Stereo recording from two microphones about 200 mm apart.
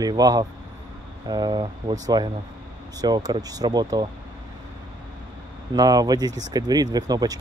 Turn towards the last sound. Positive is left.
turn(degrees=-20)  # may be behind; listen again after turning